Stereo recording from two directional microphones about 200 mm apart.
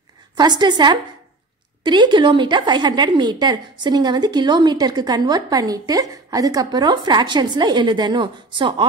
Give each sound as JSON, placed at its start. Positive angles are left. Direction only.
{"t": 0.4, "sound": "speech", "side_deg": -20}